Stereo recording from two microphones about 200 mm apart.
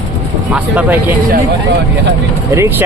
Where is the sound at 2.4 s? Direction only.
10° right (ahead or behind).